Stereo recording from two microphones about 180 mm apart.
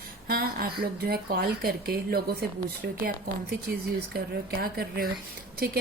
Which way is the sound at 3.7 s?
60° right (ahead or behind).